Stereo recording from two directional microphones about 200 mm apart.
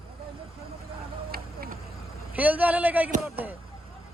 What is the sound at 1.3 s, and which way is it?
Vehicle, 50° right (ahead or behind).